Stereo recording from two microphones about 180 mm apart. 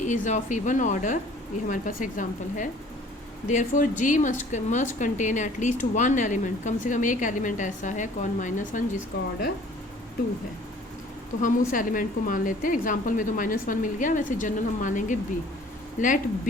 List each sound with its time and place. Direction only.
0.0 s speech: 40° left (ahead or behind)
9.1 s speech: 60° left (ahead or behind)
11.4 s speech: 45° left (ahead or behind)